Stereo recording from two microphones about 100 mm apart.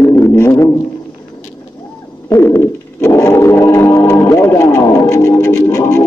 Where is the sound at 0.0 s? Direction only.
25° left (ahead or behind).